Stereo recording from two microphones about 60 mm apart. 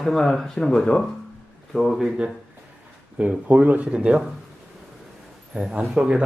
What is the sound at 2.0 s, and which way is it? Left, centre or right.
Speech, centre.